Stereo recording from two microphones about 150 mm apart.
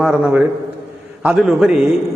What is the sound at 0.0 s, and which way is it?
A man's voice, 5° right (ahead or behind).